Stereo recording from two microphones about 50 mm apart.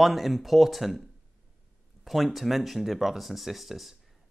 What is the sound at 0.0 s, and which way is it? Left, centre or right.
Speech, centre.